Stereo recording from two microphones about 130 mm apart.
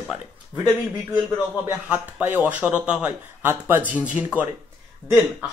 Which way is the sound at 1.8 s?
10° right (ahead or behind).